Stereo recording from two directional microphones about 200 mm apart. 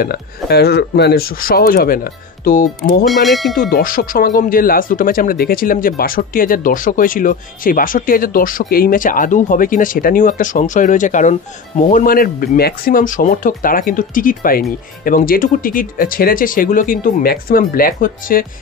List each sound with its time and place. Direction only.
0.0 s speech: 50° left (ahead or behind)
3.1 s speech: centre (ahead or behind)
3.7 s speech: 45° left (ahead or behind)